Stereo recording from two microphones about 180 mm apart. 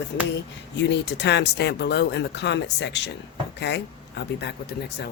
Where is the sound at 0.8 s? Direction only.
75° left (ahead or behind).